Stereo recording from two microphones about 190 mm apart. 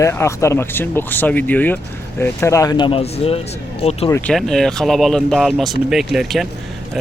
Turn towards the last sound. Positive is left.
turn(degrees=0)  # may be behind; listen again after turning